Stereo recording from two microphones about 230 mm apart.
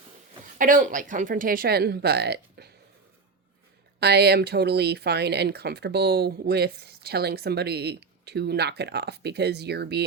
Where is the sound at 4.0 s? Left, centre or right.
Right.